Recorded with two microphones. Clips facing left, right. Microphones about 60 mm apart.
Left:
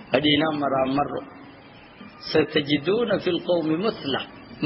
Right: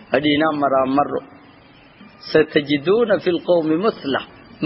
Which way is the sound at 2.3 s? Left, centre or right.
Right.